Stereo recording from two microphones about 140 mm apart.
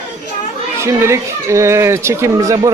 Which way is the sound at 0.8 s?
20° right (ahead or behind).